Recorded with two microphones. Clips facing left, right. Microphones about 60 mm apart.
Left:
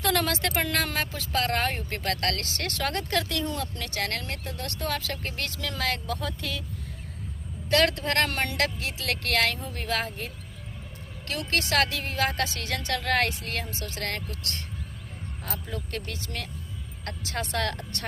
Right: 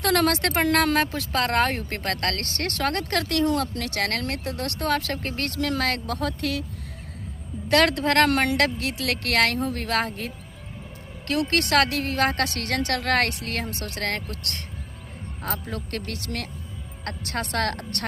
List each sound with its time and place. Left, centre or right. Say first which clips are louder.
0.0 s speech: right 4 dB; right
3.4 s speech: right 8 dB; right
7.7 s speech: right 4 dB; right
15.7 s speech: right 3 dB; right